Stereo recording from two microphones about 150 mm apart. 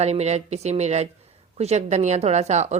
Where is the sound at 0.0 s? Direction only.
45° right (ahead or behind).